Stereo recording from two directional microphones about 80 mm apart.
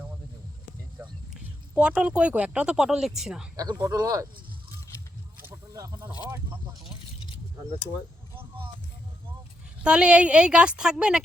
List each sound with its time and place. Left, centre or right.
1.8 s a woman's voice: centre
3.6 s speech: right
5.7 s speech: right
8.4 s a sound: right
9.8 s a woman's voice: centre